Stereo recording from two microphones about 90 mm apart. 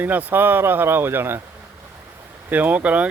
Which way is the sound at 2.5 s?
20° right (ahead or behind).